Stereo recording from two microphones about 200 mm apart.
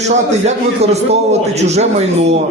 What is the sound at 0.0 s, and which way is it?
Speech, 35° right (ahead or behind).